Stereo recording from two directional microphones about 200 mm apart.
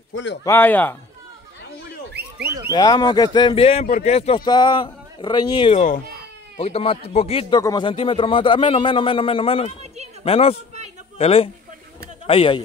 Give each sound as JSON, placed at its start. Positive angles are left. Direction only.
{"t": 0.1, "sound": "speech", "side_deg": 65}
{"t": 0.4, "sound": "speech", "side_deg": 10}
{"t": 2.3, "sound": "a sound", "side_deg": -15}
{"t": 2.7, "sound": "speech", "side_deg": 20}